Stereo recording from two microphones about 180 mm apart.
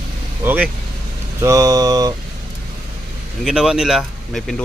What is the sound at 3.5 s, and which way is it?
Speech, 5° right (ahead or behind).